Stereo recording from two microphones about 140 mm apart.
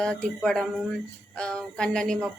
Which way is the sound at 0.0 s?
5° left (ahead or behind).